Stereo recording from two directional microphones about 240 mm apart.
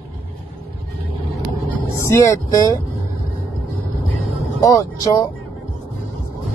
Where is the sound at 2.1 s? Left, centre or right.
Centre.